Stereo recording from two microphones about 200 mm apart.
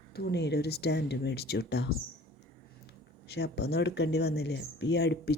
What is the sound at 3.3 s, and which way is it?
Speech, 55° left (ahead or behind).